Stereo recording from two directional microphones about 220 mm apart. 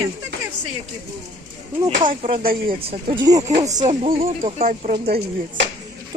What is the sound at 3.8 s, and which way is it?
A woman's voice, 30° right (ahead or behind).